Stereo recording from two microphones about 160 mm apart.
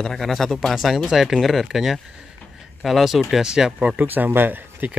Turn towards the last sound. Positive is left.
turn(degrees=-10)  # may be behind; listen again after turning